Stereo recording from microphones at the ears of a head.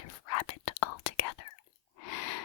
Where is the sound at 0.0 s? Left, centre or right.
Left.